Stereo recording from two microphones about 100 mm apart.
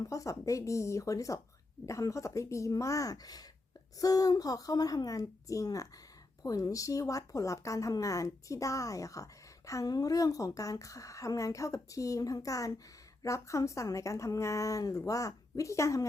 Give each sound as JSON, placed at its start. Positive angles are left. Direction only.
{"t": 0.0, "sound": "speech", "side_deg": 35}